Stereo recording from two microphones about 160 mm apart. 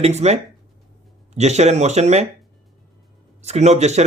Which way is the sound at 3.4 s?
45° right (ahead or behind).